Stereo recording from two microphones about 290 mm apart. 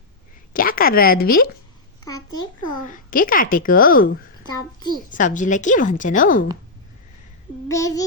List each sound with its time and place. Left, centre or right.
0.5 s speech: left
2.0 s a child's voice: centre
2.9 s a woman's voice: left
4.4 s a child's voice: centre
5.0 s a woman's voice: left
7.7 s a child's voice: centre